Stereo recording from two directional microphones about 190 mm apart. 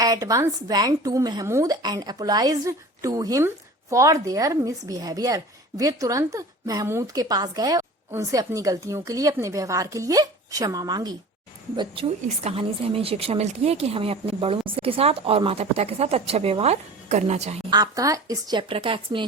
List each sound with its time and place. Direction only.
0.0 s speech: 20° right (ahead or behind); by 17.6 s 35° right (ahead or behind)
17.7 s a woman's voice: 20° right (ahead or behind)